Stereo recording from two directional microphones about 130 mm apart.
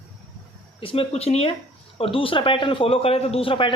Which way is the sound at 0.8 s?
45° left (ahead or behind).